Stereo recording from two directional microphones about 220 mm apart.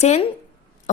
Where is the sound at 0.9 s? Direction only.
35° left (ahead or behind).